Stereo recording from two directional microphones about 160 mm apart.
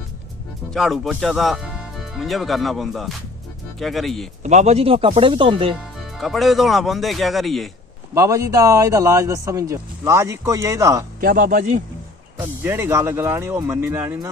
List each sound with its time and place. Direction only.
0.7 s speech: centre (ahead or behind)
4.4 s speech: 45° right (ahead or behind)
5.9 s speech: centre (ahead or behind)
8.1 s speech: 20° right (ahead or behind)
11.1 s a man's voice: 60° right (ahead or behind)
12.4 s speech: 15° right (ahead or behind)